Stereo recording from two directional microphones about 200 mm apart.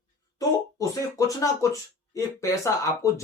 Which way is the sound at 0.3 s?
15° left (ahead or behind).